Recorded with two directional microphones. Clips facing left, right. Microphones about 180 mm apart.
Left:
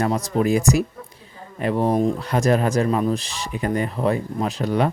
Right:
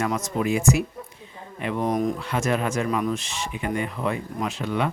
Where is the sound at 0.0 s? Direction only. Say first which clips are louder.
Left 4 dB; 35° left (ahead or behind).